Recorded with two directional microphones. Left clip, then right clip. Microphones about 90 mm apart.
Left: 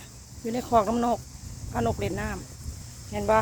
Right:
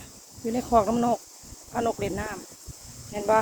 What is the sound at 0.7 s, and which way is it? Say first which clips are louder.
Speech: right 1 dB; 30° left (ahead or behind).